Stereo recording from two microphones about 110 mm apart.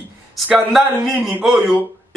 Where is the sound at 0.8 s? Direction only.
Centre (ahead or behind).